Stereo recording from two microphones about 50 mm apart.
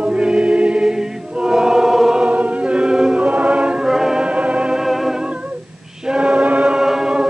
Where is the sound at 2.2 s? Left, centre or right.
Right.